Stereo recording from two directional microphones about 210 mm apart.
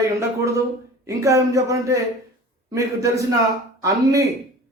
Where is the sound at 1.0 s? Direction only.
15° right (ahead or behind).